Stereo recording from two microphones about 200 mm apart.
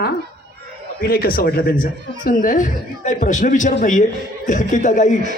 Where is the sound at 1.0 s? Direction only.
50° left (ahead or behind).